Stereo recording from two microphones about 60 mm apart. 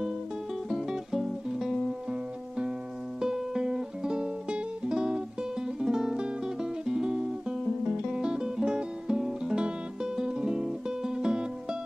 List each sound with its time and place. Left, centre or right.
0.7 s music: centre
3.2 s music: centre